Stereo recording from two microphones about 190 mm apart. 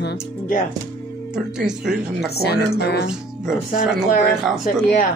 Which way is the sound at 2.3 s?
55° left (ahead or behind).